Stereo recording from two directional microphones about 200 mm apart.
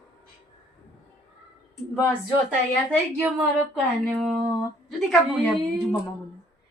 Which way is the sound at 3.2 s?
10° right (ahead or behind).